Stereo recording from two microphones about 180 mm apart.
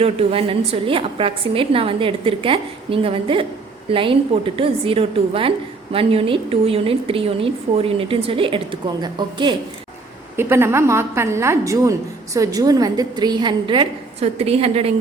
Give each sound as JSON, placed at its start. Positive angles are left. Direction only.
{"t": 0.0, "sound": "a woman's voice", "side_deg": -30}
{"t": 10.3, "sound": "a woman's voice", "side_deg": -15}